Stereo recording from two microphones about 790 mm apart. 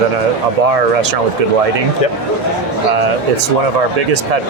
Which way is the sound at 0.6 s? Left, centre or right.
Right.